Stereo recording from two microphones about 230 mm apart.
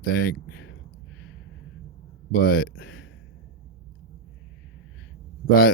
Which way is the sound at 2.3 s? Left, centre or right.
Left.